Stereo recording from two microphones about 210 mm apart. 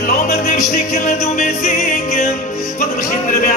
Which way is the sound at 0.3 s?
35° left (ahead or behind).